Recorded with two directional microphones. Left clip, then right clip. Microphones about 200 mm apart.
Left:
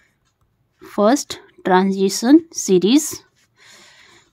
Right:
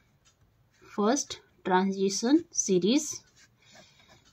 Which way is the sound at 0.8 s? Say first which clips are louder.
Left 12 dB; 55° left (ahead or behind).